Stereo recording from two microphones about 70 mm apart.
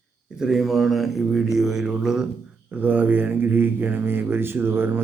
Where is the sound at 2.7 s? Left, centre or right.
Right.